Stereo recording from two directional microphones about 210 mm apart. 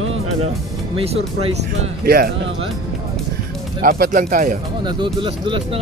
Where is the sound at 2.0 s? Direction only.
45° right (ahead or behind).